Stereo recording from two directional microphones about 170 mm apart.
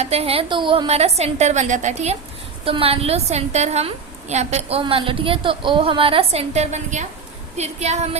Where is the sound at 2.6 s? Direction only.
35° right (ahead or behind).